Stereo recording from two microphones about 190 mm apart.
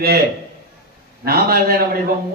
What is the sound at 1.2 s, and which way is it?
Speech, 55° right (ahead or behind).